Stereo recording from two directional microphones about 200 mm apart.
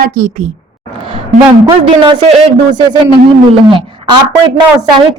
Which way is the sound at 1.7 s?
25° right (ahead or behind).